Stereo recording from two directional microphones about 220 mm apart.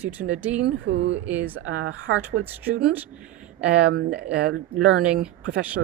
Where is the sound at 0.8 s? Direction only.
55° right (ahead or behind).